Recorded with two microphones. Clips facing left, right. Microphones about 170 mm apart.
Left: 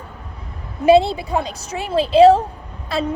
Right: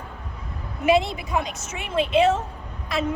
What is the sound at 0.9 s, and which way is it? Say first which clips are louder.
A woman's voice: left 7 dB; 30° left (ahead or behind).